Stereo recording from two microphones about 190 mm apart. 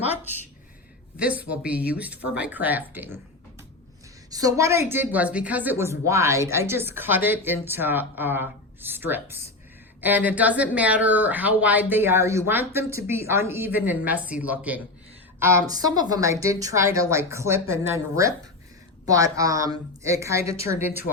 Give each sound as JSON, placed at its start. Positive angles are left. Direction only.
{"t": 1.1, "sound": "a woman's voice", "side_deg": -5}
{"t": 4.3, "sound": "a woman's voice", "side_deg": -20}